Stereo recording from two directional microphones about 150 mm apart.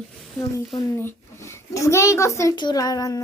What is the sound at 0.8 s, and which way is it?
A child's voice, 15° left (ahead or behind).